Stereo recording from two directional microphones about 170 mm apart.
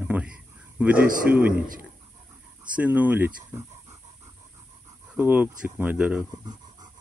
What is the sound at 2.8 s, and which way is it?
Speech, 10° right (ahead or behind).